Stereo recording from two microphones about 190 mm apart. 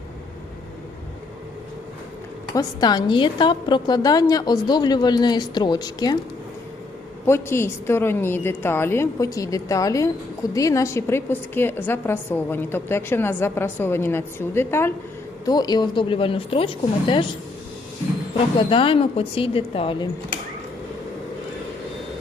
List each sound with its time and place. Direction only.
2.6 s a woman's voice: 20° left (ahead or behind)
7.3 s a woman's voice: 15° left (ahead or behind)
18.7 s a woman's voice: 30° left (ahead or behind)